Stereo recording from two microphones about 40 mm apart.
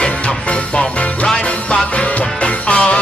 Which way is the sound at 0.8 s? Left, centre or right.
Centre.